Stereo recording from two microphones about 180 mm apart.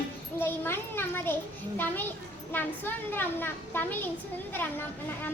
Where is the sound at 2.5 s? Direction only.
10° left (ahead or behind).